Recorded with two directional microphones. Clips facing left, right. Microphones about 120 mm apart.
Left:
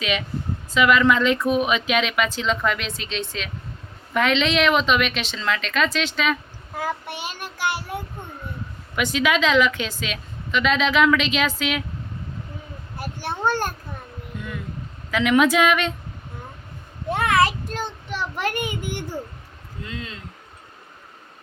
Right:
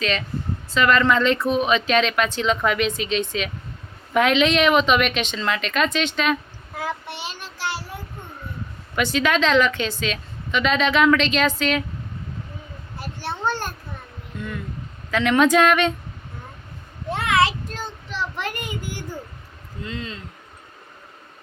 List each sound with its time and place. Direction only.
0.7 s a woman's voice: 10° left (ahead or behind)
7.1 s child singing: 50° left (ahead or behind)
9.1 s a woman's voice: 5° left (ahead or behind)
13.1 s a sound: 15° left (ahead or behind)
14.3 s speech: 10° left (ahead or behind)
17.7 s child singing: 65° left (ahead or behind)
19.9 s a woman's voice: 5° left (ahead or behind)